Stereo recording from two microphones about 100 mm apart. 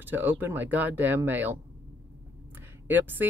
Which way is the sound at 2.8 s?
20° right (ahead or behind).